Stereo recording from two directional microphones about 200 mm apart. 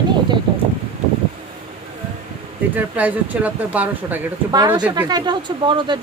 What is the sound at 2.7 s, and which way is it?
Speech, 10° right (ahead or behind).